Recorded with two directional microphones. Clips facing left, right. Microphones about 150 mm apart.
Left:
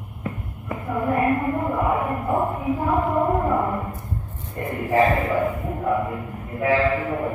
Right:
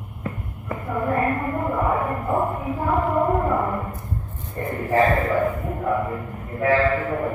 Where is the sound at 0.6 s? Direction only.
15° left (ahead or behind).